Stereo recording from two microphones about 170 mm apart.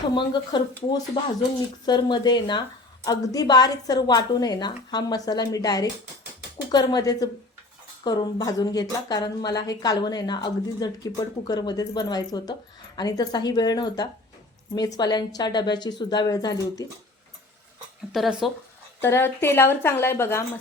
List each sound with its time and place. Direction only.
0.1 s a woman's voice: 25° left (ahead or behind)
18.1 s speech: centre (ahead or behind)
19.0 s a woman's voice: 15° left (ahead or behind)